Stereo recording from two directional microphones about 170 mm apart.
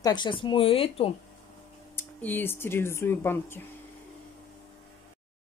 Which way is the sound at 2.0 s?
10° left (ahead or behind).